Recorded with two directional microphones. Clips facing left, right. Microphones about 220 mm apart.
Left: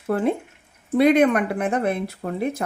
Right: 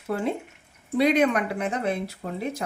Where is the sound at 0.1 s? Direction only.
55° left (ahead or behind).